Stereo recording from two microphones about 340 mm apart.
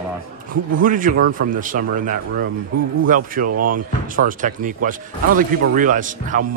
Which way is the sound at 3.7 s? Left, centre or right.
Right.